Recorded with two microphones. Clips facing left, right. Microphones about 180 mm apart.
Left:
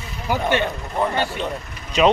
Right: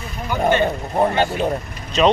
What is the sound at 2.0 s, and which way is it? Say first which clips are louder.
Speech: right 1 dB; 10° left (ahead or behind).